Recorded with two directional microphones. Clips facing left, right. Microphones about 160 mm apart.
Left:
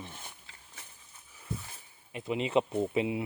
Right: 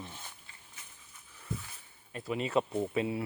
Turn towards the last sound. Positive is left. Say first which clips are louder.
# left 2 dB
turn(degrees=20)  # may be behind; listen again after turning